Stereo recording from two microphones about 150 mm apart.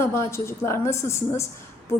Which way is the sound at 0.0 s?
15° left (ahead or behind).